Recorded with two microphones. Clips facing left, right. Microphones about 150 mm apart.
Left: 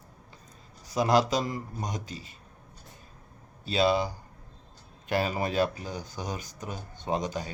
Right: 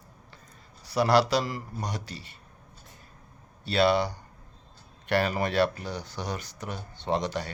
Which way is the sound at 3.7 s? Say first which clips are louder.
Right 2 dB; 70° right (ahead or behind).